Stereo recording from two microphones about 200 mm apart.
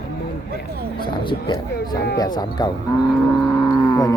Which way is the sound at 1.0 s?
25° left (ahead or behind).